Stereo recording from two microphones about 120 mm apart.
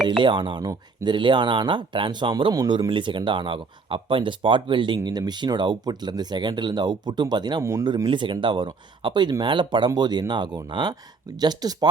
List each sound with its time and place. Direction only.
0.2 s speech: 45° right (ahead or behind)
7.6 s speech: 25° right (ahead or behind)
8.0 s speech: 40° right (ahead or behind)